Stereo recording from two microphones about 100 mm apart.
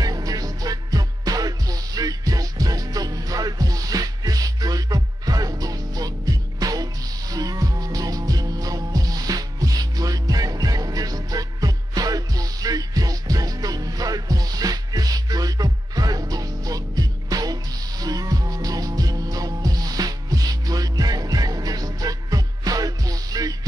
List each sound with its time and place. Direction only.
0.0 s music: 40° right (ahead or behind)